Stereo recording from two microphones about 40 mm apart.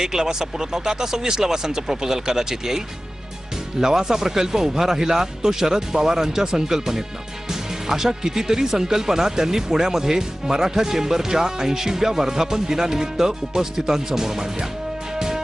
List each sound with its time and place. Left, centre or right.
0.0 s speech: centre
15.1 s music: centre